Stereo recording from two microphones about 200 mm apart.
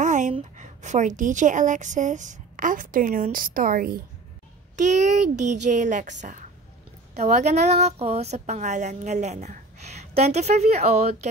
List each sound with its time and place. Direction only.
0.0 s a sound: 40° right (ahead or behind)
0.3 s a woman's voice: 35° right (ahead or behind)
7.2 s a woman's voice: 35° right (ahead or behind)